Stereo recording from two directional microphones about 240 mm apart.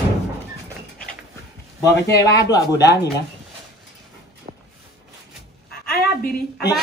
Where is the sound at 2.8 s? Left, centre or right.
Left.